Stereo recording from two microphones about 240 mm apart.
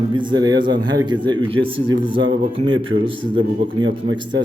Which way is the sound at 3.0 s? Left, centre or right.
Right.